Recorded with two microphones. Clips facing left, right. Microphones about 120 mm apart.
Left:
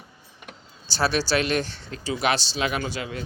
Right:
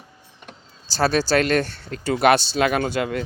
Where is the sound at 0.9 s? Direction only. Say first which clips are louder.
Right 4 dB; 40° right (ahead or behind).